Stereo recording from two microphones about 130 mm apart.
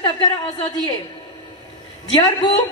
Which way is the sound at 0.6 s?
30° left (ahead or behind).